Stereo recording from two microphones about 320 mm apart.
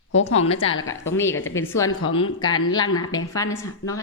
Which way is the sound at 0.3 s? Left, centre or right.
Centre.